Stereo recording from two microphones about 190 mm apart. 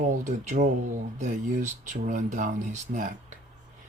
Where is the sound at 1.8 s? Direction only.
45° right (ahead or behind).